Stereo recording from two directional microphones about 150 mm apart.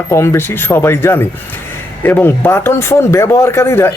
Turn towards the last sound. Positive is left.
turn(degrees=15)  # may be behind; listen again after turning